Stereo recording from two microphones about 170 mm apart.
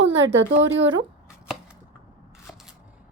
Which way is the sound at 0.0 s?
90° right.